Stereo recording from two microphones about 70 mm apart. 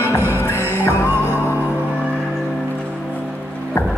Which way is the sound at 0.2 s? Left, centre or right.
Right.